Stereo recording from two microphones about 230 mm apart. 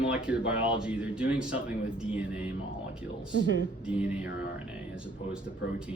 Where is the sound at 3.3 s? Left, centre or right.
Right.